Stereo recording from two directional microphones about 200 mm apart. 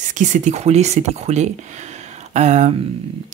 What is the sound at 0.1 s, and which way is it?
Speech, 40° right (ahead or behind).